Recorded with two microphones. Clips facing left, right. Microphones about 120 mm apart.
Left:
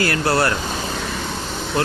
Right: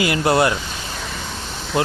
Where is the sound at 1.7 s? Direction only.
20° right (ahead or behind).